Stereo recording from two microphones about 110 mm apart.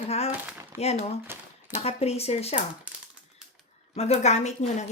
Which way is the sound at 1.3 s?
20° right (ahead or behind).